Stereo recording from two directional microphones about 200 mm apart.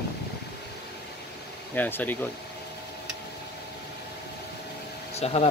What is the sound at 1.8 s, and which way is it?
Speech, 10° left (ahead or behind).